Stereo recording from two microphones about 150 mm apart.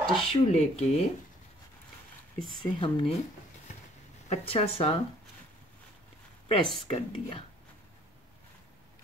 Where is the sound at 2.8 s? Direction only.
35° left (ahead or behind).